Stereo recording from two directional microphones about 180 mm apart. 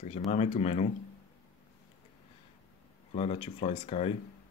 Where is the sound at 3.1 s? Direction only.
30° left (ahead or behind).